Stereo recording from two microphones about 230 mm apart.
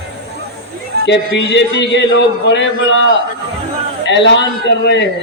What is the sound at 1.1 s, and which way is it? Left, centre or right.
Speech, left.